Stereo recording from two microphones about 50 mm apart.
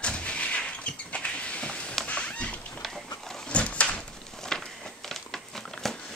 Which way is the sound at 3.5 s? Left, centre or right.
Left.